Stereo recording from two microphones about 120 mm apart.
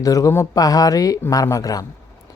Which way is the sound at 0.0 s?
30° left (ahead or behind).